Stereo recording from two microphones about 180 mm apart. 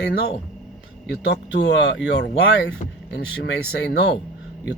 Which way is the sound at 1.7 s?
70° left (ahead or behind).